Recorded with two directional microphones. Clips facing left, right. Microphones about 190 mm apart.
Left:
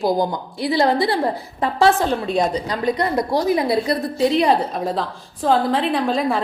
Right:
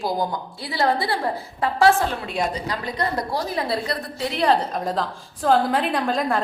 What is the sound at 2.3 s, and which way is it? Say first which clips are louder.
A woman's voice: left 5 dB; 20° left (ahead or behind).